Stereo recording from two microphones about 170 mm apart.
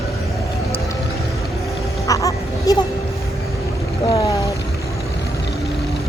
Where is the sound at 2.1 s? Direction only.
20° left (ahead or behind).